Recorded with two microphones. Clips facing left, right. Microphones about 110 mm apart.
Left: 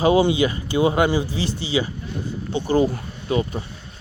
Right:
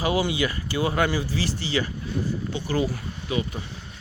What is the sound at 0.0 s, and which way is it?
Speech, 25° left (ahead or behind).